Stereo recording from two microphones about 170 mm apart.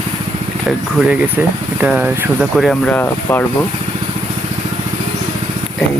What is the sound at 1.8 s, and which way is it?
Speech, 5° right (ahead or behind).